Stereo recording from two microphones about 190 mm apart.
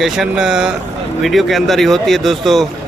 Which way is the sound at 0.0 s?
Centre (ahead or behind).